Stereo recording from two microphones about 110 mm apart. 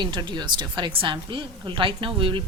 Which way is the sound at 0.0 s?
40° right (ahead or behind).